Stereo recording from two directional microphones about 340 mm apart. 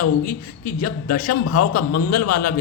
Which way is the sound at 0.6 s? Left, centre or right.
Left.